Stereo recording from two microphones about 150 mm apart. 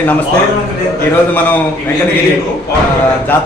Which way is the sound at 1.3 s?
10° left (ahead or behind).